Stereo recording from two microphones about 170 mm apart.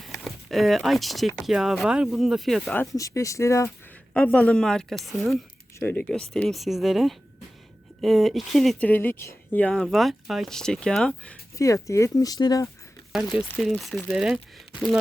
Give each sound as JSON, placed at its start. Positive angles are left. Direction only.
{"t": 0.0, "sound": "a sound", "side_deg": 0}
{"t": 1.4, "sound": "speech", "side_deg": 0}
{"t": 2.9, "sound": "speech", "side_deg": 20}
{"t": 11.5, "sound": "speech", "side_deg": 20}
{"t": 13.1, "sound": "speech", "side_deg": 0}